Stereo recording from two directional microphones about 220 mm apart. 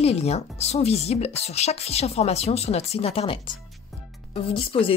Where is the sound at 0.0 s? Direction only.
30° left (ahead or behind).